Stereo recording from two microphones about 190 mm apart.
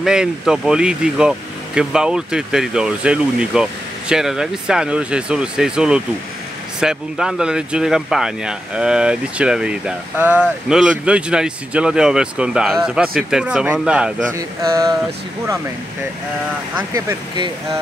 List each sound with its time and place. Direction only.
0.0 s speech: 5° right (ahead or behind)
14.3 s speech: 15° right (ahead or behind)
16.9 s speech: 20° right (ahead or behind)